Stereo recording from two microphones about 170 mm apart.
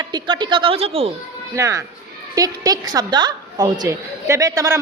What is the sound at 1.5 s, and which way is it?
A child's voice, 20° right (ahead or behind).